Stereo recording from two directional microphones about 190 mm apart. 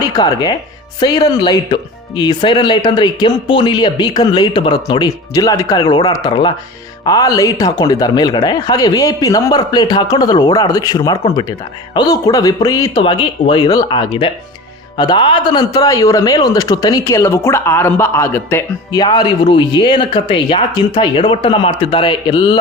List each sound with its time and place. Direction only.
0.0 s speech: 20° left (ahead or behind)